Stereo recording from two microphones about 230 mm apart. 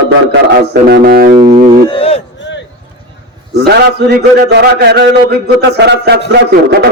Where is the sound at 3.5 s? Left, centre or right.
Right.